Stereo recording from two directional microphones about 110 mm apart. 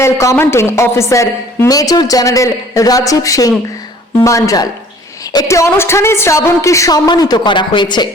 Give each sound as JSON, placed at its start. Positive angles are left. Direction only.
{"t": 0.0, "sound": "a woman's voice", "side_deg": 25}